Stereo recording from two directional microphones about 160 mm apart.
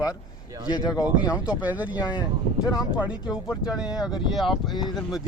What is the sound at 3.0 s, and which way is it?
Speech, 5° right (ahead or behind).